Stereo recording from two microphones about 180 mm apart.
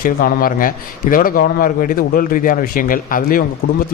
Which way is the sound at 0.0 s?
50° left (ahead or behind).